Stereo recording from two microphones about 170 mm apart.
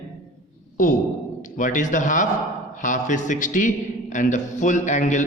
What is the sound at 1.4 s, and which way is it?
A man's voice, 50° left (ahead or behind).